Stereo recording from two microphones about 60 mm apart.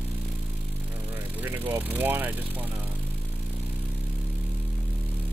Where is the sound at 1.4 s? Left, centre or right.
Right.